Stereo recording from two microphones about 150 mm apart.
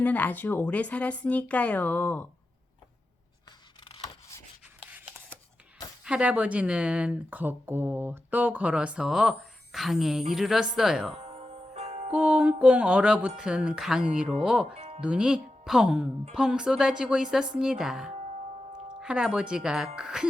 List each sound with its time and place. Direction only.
0.0 s a woman's voice: 10° left (ahead or behind)
6.1 s speech: 10° right (ahead or behind)
11.2 s music: 45° right (ahead or behind)
12.1 s speech: 10° right (ahead or behind)
14.8 s music: 45° right (ahead or behind)
15.0 s speech: 5° right (ahead or behind)
18.1 s music: 45° right (ahead or behind)
18.9 s speech: 5° right (ahead or behind)